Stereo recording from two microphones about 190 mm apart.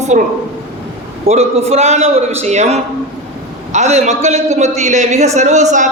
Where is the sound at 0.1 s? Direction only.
40° right (ahead or behind).